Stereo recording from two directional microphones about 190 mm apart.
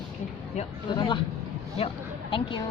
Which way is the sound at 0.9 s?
25° left (ahead or behind).